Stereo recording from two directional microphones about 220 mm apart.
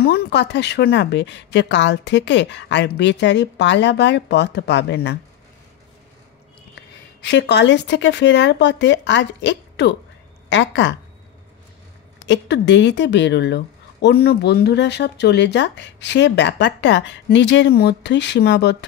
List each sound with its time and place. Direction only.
0.0 s a woman's voice: 45° left (ahead or behind)
7.2 s a woman's voice: 50° left (ahead or behind)
12.3 s a woman's voice: 55° left (ahead or behind)